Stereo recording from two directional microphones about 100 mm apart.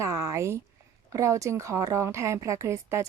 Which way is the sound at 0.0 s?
30° right (ahead or behind).